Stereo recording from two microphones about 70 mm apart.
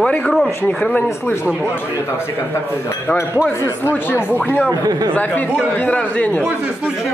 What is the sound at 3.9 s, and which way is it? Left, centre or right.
Speech, left.